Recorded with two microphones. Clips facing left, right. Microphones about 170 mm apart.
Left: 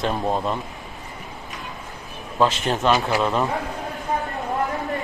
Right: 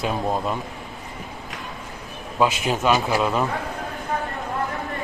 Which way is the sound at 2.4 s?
10° right (ahead or behind).